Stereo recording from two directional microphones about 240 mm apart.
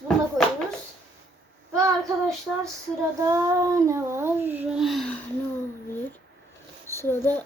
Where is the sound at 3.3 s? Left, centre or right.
Centre.